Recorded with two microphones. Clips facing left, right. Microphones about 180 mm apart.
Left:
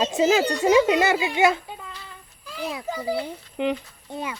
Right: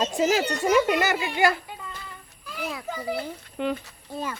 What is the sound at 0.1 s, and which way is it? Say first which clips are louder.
Speech: left 3 dB; 20° left (ahead or behind).